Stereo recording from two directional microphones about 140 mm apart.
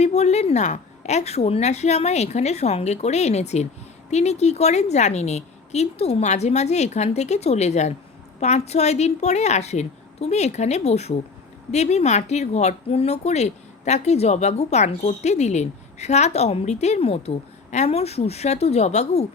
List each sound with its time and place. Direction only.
0.0 s a woman's voice: 50° left (ahead or behind)